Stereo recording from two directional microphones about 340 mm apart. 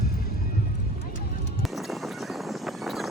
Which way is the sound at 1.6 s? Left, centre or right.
Centre.